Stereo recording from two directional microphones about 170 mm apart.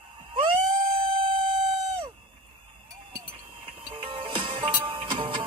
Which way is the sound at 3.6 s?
30° right (ahead or behind).